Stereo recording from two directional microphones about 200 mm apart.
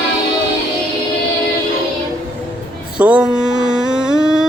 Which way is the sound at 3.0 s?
5° right (ahead or behind).